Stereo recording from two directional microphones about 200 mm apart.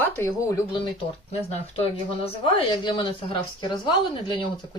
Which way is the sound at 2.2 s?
25° left (ahead or behind).